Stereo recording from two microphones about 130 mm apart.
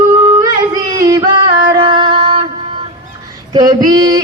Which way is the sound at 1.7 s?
40° right (ahead or behind).